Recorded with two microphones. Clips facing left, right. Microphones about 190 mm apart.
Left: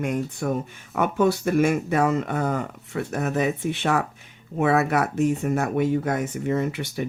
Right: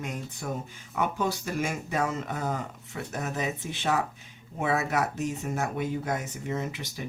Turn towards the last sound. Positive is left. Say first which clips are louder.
# left 8 dB
turn(degrees=60)  # may be behind; listen again after turning